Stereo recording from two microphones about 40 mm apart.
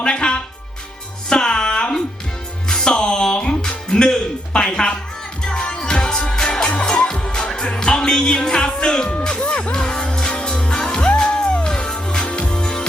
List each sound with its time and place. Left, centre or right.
0.0 s music: left
9.4 s music: left
11.6 s music: centre
12.2 s music: left